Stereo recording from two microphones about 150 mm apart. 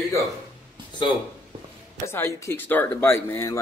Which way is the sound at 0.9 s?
30° left (ahead or behind).